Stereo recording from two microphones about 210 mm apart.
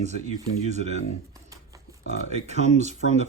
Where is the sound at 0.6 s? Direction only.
30° right (ahead or behind).